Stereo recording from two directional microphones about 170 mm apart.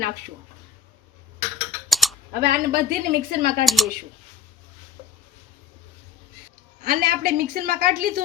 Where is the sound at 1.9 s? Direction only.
Centre (ahead or behind).